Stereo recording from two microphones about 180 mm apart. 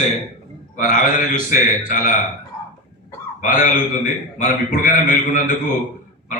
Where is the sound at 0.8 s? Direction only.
50° left (ahead or behind).